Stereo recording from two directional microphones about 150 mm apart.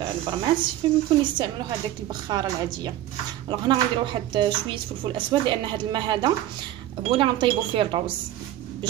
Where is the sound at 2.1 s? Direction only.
30° right (ahead or behind).